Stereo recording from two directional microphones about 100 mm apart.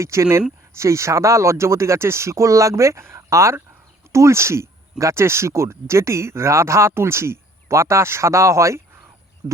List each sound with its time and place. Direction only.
0.0 s speech: 30° right (ahead or behind)